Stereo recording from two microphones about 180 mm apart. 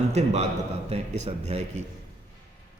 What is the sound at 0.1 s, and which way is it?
A man's voice, 40° right (ahead or behind).